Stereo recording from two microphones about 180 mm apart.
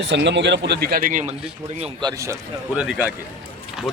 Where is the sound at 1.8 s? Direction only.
25° right (ahead or behind).